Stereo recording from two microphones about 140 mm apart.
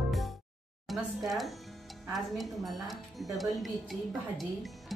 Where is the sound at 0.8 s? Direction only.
Centre (ahead or behind).